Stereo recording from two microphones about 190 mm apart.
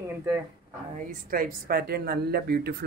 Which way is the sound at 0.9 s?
50° right (ahead or behind).